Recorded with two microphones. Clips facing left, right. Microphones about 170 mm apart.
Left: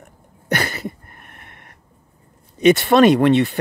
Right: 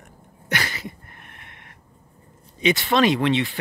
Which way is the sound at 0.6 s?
55° left (ahead or behind).